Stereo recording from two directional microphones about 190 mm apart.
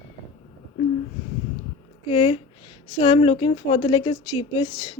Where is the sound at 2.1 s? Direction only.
30° left (ahead or behind).